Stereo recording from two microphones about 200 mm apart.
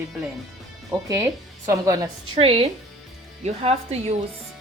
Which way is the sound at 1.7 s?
15° right (ahead or behind).